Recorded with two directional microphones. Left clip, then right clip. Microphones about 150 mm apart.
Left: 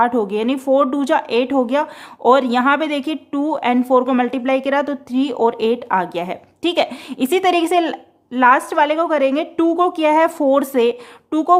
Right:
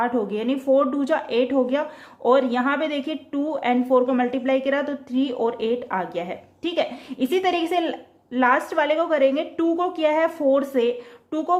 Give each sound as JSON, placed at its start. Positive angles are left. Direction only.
{"t": 0.0, "sound": "speech", "side_deg": 40}